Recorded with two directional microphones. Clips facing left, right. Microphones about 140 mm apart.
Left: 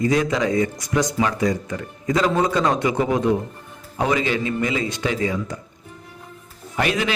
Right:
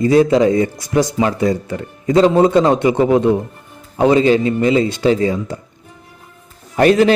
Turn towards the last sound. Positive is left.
turn(degrees=-40)  # may be behind; listen again after turning